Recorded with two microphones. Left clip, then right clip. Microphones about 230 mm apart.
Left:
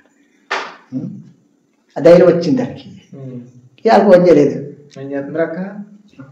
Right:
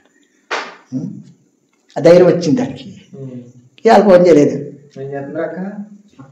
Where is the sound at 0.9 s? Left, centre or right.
Right.